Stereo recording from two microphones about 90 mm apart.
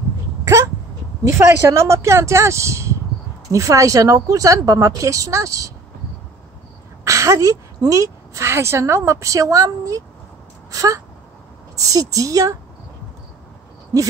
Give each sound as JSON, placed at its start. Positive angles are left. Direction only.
{"t": 1.2, "sound": "a woman's voice", "side_deg": -30}
{"t": 7.1, "sound": "a woman's voice", "side_deg": -35}
{"t": 10.7, "sound": "a sound", "side_deg": -40}
{"t": 11.7, "sound": "a woman's voice", "side_deg": -40}